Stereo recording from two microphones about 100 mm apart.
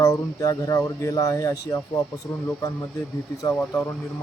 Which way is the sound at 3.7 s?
25° left (ahead or behind).